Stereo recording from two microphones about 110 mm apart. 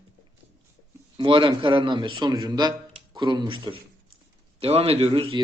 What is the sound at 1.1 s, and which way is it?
Speech, 50° right (ahead or behind).